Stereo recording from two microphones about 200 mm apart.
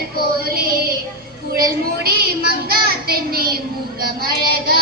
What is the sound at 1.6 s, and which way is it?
A woman's voice, 50° right (ahead or behind).